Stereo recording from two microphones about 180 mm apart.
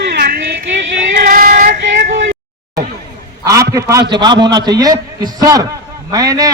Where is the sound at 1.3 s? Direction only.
50° right (ahead or behind).